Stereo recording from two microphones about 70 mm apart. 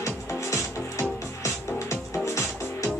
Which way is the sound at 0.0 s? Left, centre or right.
Left.